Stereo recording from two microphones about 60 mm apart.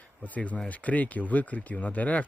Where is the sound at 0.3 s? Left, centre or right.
Left.